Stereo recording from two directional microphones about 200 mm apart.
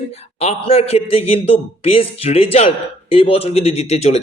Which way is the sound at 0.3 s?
30° left (ahead or behind).